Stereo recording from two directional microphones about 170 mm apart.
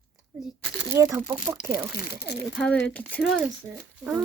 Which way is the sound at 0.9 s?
20° right (ahead or behind).